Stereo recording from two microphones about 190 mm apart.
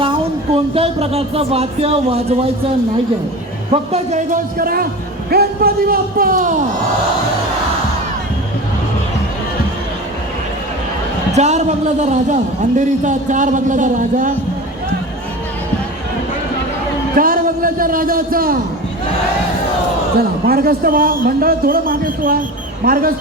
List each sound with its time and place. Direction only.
0.5 s a man's voice: 30° right (ahead or behind)
3.7 s a man's voice: 35° right (ahead or behind)
11.3 s a man's voice: 35° right (ahead or behind)
17.2 s a man's voice: 50° right (ahead or behind)
20.5 s a man's voice: 50° right (ahead or behind)